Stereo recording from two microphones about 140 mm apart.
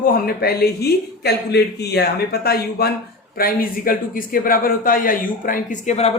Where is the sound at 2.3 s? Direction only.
90° left.